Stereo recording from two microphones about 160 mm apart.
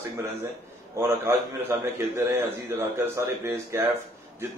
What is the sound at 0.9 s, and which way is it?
Speech, 15° right (ahead or behind).